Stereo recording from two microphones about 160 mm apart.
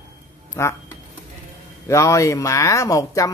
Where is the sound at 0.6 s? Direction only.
20° left (ahead or behind).